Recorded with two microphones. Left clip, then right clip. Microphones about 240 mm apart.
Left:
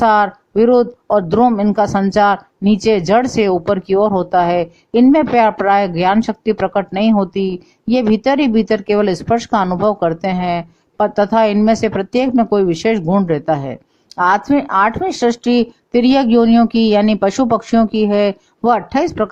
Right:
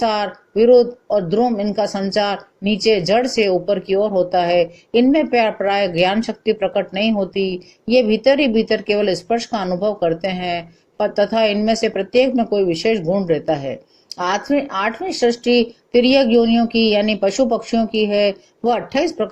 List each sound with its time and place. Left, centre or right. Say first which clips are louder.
0.0 s speech: left 7 dB; left